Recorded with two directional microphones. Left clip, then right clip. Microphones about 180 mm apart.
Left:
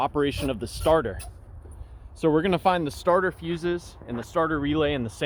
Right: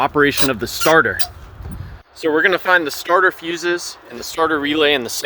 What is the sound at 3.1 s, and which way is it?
Speech, centre (ahead or behind).